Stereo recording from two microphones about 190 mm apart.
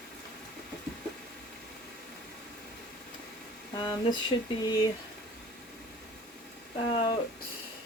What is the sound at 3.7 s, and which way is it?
Speech, 25° left (ahead or behind).